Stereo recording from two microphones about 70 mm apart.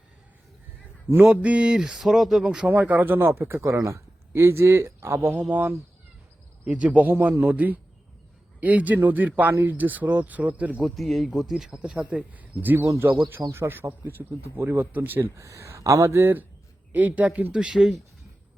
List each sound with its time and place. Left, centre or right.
1.1 s speech: right
1.4 s speech: centre
2.6 s speech: right
3.2 s speech: right
4.3 s speech: right
10.8 s a man's voice: centre; by 15.3 s right
15.4 s speech: right
16.1 s speech: right; by 17.9 s centre